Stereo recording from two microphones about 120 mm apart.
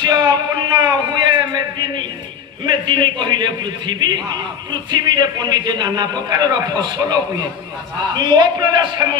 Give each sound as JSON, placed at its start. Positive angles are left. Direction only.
{"t": 0.0, "sound": "a sound", "side_deg": -35}
{"t": 2.6, "sound": "a man's voice", "side_deg": -40}
{"t": 8.2, "sound": "a man's voice", "side_deg": -35}